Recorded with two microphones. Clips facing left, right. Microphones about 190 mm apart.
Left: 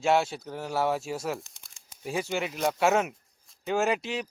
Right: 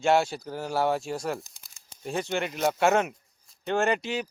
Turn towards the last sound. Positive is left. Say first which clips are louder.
# right 1 dB
turn(degrees=0)  # may be behind; listen again after turning